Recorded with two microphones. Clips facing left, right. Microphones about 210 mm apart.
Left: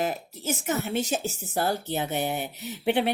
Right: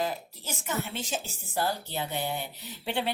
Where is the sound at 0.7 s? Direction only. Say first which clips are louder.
Left 5 dB; 40° left (ahead or behind).